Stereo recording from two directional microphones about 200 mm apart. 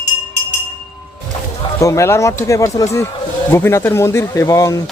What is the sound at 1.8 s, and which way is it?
Speech, 15° left (ahead or behind).